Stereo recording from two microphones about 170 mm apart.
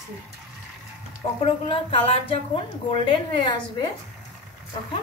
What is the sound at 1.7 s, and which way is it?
A woman's voice, 30° left (ahead or behind).